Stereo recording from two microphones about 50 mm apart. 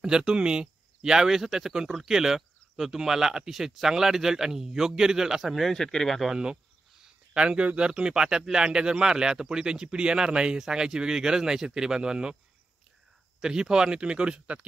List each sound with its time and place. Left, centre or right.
0.0 s speech: centre
5.6 s speech: centre
6.2 s speech: centre
13.4 s speech: centre